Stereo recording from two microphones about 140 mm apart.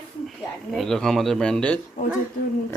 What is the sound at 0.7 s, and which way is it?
Speech, 5° left (ahead or behind).